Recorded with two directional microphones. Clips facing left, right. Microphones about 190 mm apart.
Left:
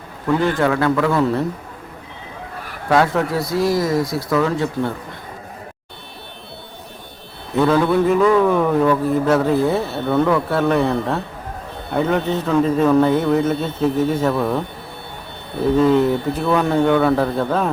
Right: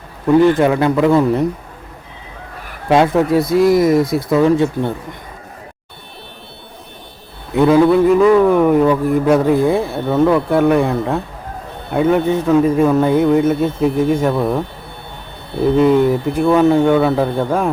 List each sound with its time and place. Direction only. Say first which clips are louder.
0.3 s speech: right 6 dB; 15° right (ahead or behind)
2.9 s speech: right 5 dB; 20° right (ahead or behind)
7.5 s a sound: right 4 dB; 15° right (ahead or behind)
8.2 s speech: right 4 dB; 15° right (ahead or behind)
15.8 s speech: right 3 dB; 10° right (ahead or behind)